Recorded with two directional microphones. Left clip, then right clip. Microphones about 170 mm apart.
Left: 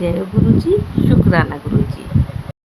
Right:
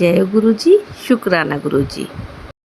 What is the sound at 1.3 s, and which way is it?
Speech, 20° right (ahead or behind).